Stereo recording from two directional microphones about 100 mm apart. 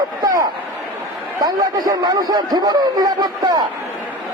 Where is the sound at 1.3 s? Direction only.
45° right (ahead or behind).